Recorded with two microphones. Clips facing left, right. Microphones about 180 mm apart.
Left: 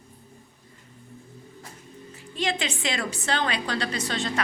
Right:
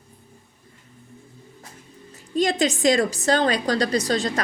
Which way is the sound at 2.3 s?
40° right (ahead or behind).